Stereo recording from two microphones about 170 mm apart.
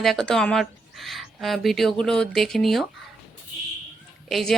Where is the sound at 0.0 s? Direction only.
Centre (ahead or behind).